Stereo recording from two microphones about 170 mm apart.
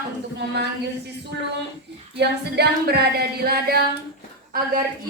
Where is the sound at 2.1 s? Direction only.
75° right (ahead or behind).